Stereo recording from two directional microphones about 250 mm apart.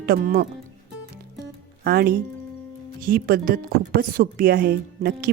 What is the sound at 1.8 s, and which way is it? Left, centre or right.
A woman's voice, right.